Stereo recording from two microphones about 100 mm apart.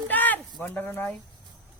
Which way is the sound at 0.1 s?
15° left (ahead or behind).